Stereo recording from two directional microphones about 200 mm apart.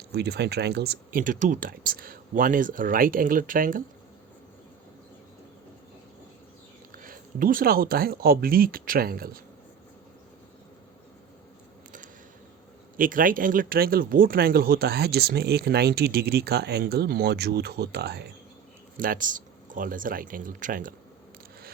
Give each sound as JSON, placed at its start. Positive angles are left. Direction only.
{"t": 0.1, "sound": "speech", "side_deg": -55}
{"t": 6.9, "sound": "speech", "side_deg": -45}
{"t": 13.0, "sound": "speech", "side_deg": -45}
{"t": 18.9, "sound": "speech", "side_deg": -45}